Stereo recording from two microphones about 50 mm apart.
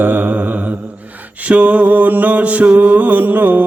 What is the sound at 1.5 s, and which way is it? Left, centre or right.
Mantra, right.